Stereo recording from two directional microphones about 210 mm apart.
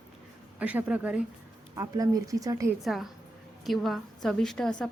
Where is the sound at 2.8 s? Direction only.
Centre (ahead or behind).